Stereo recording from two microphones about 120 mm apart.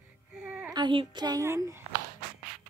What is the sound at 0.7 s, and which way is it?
Speech, 40° right (ahead or behind).